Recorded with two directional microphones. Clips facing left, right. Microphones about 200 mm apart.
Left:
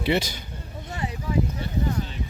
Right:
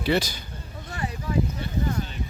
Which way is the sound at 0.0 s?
25° left (ahead or behind).